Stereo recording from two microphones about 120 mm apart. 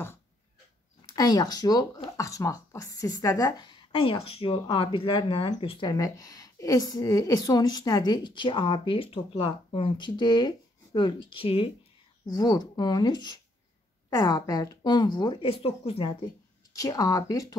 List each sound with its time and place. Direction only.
1.0 s a woman's voice: 35° left (ahead or behind)
5.9 s a woman's voice: 30° left (ahead or behind); by 11.7 s 50° left (ahead or behind)
12.3 s a woman's voice: 35° left (ahead or behind); by 16.3 s 50° left (ahead or behind)
16.7 s speech: 30° left (ahead or behind)